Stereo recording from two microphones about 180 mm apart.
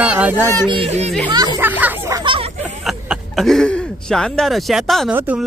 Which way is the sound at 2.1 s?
30° right (ahead or behind).